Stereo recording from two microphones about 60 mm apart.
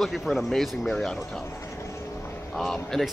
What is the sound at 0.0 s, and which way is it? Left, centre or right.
Speech, centre.